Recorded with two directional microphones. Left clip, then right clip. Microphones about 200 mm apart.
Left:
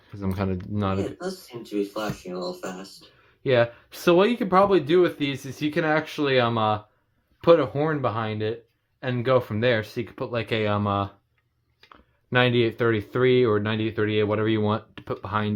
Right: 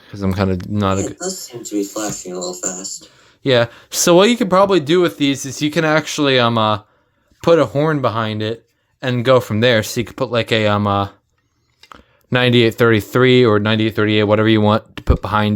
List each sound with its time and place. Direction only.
0.0 s speech: 40° right (ahead or behind)
3.4 s speech: 50° right (ahead or behind)